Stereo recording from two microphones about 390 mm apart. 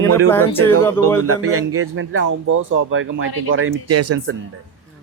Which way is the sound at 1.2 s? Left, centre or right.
Right.